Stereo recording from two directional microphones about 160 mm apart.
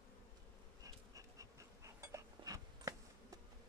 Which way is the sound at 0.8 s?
20° right (ahead or behind).